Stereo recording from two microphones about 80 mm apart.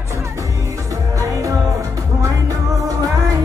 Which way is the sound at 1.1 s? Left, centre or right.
Right.